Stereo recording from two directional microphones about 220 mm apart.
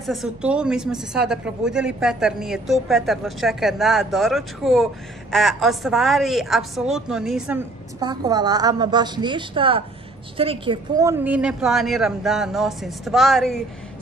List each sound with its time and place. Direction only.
0.0 s a woman's voice: centre (ahead or behind)
8.0 s a woman's voice: 20° right (ahead or behind); by 13.6 s centre (ahead or behind)